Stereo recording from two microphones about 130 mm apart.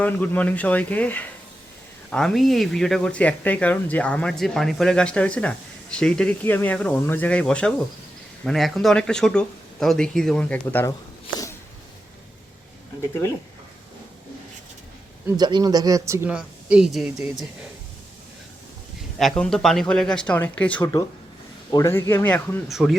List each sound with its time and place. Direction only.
0.0 s speech: 10° left (ahead or behind)
15.4 s speech: 30° right (ahead or behind)
16.3 s speech: 10° right (ahead or behind)
19.2 s speech: 5° left (ahead or behind)
21.7 s a man's voice: 25° left (ahead or behind)
22.7 s speech: centre (ahead or behind)